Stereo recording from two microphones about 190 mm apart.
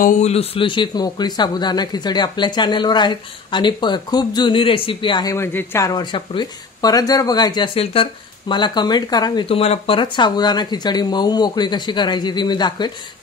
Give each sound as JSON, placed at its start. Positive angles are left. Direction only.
{"t": 0.0, "sound": "a man's voice", "side_deg": 35}